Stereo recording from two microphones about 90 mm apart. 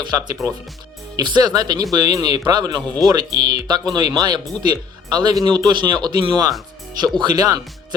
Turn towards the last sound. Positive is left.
turn(degrees=-50)  # may be behind; listen again after turning